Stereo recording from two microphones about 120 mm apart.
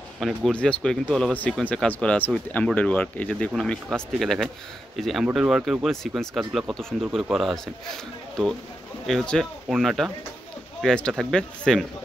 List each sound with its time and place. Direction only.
0.2 s speech: 5° left (ahead or behind)